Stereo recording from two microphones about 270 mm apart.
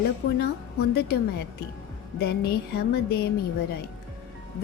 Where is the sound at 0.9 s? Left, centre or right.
Left.